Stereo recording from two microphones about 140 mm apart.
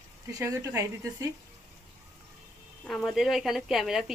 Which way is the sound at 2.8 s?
Centre (ahead or behind).